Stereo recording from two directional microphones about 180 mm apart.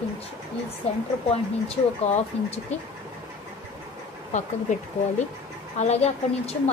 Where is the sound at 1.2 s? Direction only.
35° left (ahead or behind).